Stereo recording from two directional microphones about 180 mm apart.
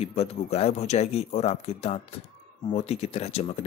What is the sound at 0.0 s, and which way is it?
Speech, 35° left (ahead or behind).